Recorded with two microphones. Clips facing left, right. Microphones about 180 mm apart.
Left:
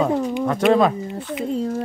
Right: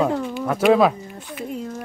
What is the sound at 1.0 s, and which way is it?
Speech, 25° left (ahead or behind).